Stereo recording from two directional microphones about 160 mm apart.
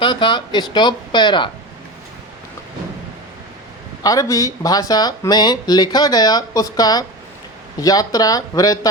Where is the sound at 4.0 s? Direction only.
20° left (ahead or behind).